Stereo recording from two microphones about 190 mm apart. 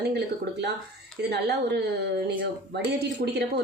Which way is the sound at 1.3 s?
60° right (ahead or behind).